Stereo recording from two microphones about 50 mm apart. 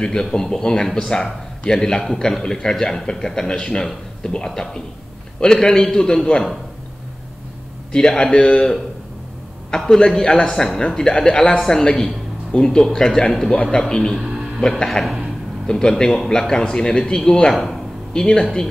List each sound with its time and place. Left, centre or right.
0.0 s a man's voice: centre
7.9 s a man's voice: centre
9.7 s a man's voice: centre
10.5 s speech: centre
10.9 s a man's voice: centre